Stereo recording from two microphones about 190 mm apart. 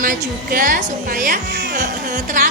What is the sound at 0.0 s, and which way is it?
A woman's voice, 45° right (ahead or behind).